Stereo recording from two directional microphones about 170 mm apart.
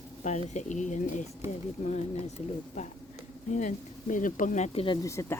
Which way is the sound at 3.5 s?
50° left (ahead or behind).